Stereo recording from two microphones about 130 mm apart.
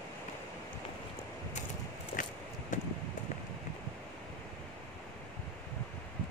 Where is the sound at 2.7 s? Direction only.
75° left (ahead or behind).